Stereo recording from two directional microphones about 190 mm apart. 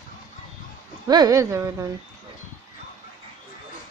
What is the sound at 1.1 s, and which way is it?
Speech, 20° right (ahead or behind).